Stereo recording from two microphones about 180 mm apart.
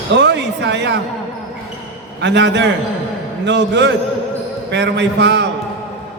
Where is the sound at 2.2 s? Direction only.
80° right.